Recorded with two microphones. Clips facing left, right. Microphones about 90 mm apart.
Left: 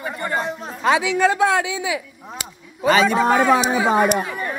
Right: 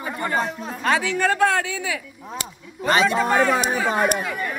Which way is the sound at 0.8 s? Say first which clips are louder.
Left 4 dB; 15° left (ahead or behind).